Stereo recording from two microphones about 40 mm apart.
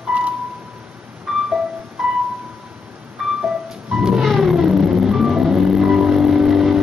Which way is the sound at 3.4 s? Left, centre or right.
Centre.